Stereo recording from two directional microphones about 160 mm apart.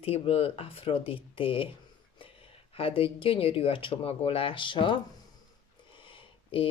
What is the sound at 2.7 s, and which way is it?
Speech, 35° left (ahead or behind).